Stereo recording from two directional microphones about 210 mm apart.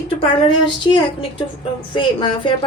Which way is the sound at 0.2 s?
20° left (ahead or behind).